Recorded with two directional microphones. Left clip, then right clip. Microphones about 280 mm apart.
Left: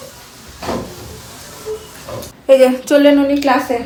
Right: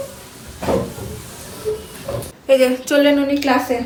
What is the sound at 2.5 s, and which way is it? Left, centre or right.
A woman's voice, centre.